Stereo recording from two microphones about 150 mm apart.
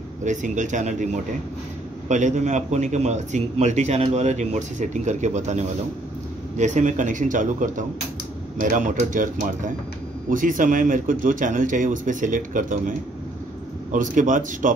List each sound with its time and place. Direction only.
0.2 s a man's voice: 55° right (ahead or behind)
13.9 s a man's voice: 60° right (ahead or behind)